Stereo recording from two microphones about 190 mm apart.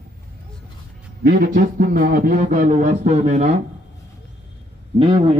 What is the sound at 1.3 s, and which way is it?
A man's voice, 50° right (ahead or behind).